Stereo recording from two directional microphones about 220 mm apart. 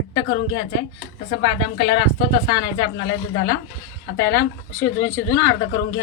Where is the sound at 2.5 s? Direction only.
20° left (ahead or behind).